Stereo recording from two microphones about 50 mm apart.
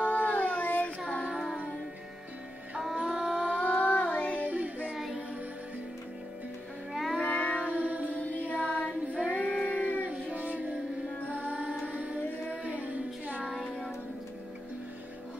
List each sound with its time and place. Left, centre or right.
0.0 s child singing: left
3.0 s a sound: centre
3.6 s child singing: left
4.5 s child singing: right
4.9 s music: centre
6.9 s music: centre
7.2 s child singing: left
7.6 s music: right
8.1 s music: left
9.7 s a sound: left
10.3 s music: right
13.5 s child singing: centre